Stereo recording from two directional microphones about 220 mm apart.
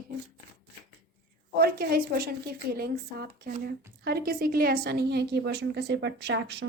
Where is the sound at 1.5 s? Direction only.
45° right (ahead or behind).